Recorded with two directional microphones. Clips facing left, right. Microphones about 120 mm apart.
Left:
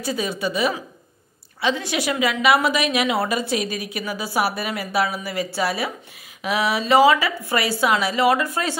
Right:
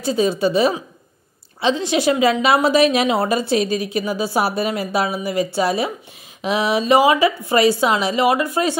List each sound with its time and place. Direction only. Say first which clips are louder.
0.0 s a woman's voice: right 7 dB; 30° right (ahead or behind)